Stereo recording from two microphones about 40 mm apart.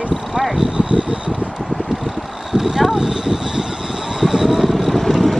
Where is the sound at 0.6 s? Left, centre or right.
Right.